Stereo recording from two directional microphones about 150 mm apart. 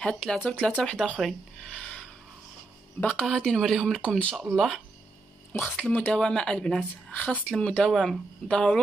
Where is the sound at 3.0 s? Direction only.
10° left (ahead or behind).